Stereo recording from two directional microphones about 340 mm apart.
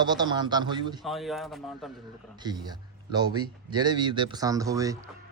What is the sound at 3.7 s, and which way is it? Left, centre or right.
Speech, centre.